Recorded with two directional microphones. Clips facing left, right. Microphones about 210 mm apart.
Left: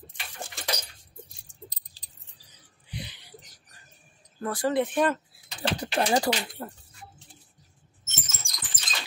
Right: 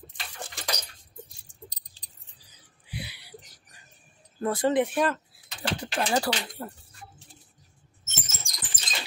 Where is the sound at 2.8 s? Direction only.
10° right (ahead or behind).